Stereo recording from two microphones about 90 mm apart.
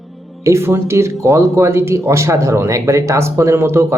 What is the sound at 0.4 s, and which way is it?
Speech, 30° right (ahead or behind).